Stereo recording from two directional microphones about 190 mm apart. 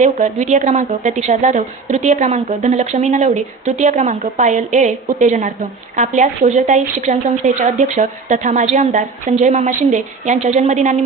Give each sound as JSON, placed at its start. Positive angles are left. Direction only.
{"t": 0.0, "sound": "a woman's voice", "side_deg": -40}